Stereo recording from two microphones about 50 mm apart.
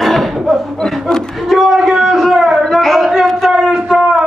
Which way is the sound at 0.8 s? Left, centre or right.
Centre.